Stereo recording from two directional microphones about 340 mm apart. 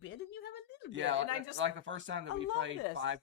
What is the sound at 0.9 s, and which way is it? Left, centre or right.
Speech, right.